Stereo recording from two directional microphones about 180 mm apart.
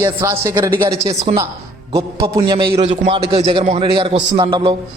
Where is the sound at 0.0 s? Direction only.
15° right (ahead or behind).